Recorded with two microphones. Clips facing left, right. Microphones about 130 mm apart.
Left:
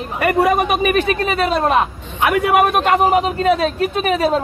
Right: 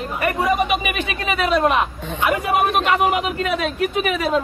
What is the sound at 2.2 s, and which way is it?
Speech, 65° left (ahead or behind).